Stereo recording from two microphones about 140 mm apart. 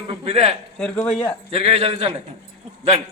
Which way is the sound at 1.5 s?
45° right (ahead or behind).